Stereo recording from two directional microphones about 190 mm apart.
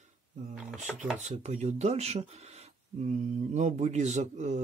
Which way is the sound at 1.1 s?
35° right (ahead or behind).